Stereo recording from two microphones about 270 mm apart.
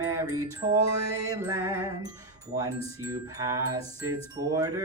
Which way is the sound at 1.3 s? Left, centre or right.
Centre.